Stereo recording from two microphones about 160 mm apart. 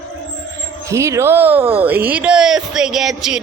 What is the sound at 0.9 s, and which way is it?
Speech, 20° right (ahead or behind).